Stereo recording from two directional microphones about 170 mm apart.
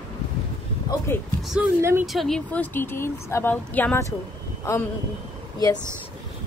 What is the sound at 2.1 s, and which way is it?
A woman's voice, centre (ahead or behind).